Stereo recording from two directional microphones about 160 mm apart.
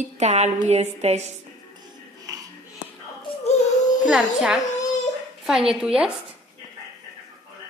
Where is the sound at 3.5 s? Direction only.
50° left (ahead or behind).